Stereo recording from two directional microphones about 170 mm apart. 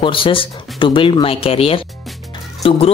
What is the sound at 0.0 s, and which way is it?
Speech, 30° left (ahead or behind).